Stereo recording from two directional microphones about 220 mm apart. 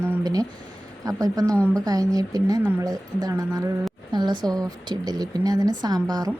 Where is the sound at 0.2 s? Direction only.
15° right (ahead or behind).